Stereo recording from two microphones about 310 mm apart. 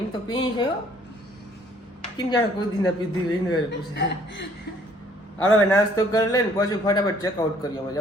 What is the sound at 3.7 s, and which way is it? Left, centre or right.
Speech, left.